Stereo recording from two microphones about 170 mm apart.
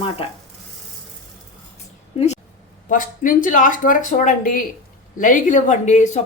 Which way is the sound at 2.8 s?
50° left (ahead or behind).